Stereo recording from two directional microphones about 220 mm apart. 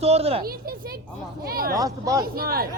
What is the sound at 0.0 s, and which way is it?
Speech, 25° right (ahead or behind).